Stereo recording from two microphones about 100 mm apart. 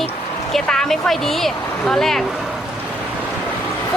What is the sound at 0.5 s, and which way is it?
Speech, 5° left (ahead or behind).